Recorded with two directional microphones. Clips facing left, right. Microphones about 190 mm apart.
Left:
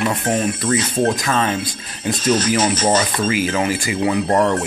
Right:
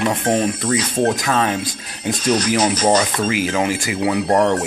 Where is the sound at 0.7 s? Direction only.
10° right (ahead or behind).